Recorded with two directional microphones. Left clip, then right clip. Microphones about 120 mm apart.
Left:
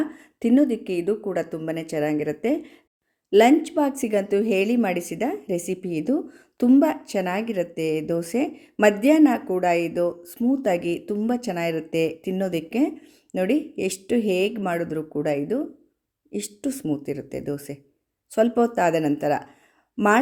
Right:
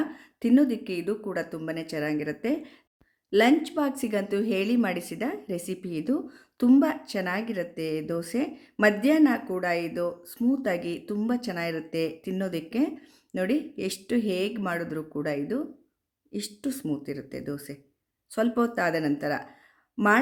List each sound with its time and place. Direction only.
0.0 s a woman's voice: 25° left (ahead or behind)